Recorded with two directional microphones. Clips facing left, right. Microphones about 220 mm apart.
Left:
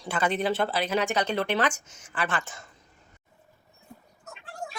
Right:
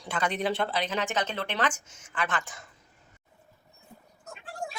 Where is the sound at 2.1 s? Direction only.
35° left (ahead or behind).